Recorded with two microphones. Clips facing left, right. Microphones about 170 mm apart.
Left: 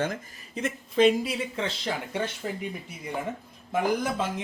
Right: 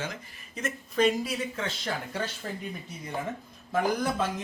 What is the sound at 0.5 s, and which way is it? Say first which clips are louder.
Speech: left 3 dB; 25° left (ahead or behind).